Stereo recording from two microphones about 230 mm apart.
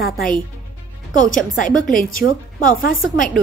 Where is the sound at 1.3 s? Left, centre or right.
Left.